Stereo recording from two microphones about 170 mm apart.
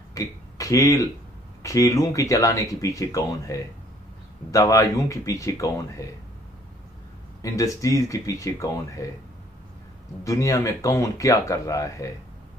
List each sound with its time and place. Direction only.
0.1 s a sound: 20° left (ahead or behind)
1.6 s speech: 20° left (ahead or behind)
7.4 s speech: 20° left (ahead or behind)
10.2 s speech: 20° left (ahead or behind)